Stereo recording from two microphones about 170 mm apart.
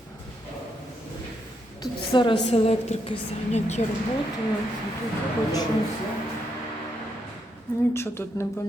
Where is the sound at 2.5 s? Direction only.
35° left (ahead or behind).